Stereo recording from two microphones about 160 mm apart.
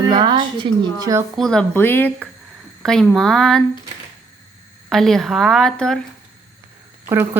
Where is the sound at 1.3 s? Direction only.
5° left (ahead or behind).